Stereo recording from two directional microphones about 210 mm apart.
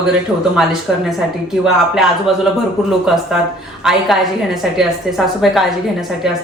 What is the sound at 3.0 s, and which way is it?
Speech, centre (ahead or behind).